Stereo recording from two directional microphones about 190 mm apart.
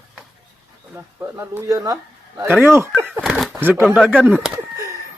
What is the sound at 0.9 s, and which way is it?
Speech, 10° right (ahead or behind).